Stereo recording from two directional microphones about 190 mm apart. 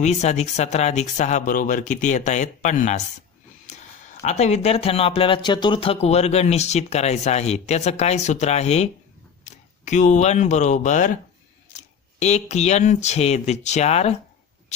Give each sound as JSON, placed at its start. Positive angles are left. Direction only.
{"t": 0.0, "sound": "speech", "side_deg": 35}
{"t": 4.2, "sound": "speech", "side_deg": 35}